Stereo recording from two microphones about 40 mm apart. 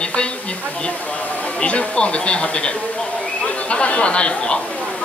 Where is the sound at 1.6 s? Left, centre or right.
Left.